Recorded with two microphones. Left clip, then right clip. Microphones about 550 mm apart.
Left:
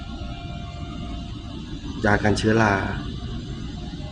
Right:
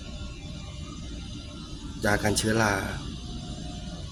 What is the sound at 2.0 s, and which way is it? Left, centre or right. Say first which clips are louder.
Speech: left 5 dB; right.